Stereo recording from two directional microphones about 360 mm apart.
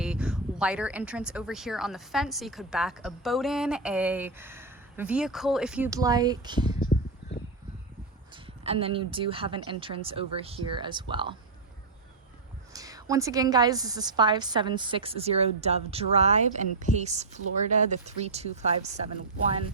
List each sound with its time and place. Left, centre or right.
0.0 s speech: centre
8.4 s a woman's voice: centre
12.7 s a woman's voice: centre